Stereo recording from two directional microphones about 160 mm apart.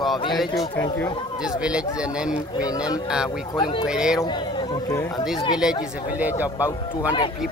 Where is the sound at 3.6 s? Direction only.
30° left (ahead or behind).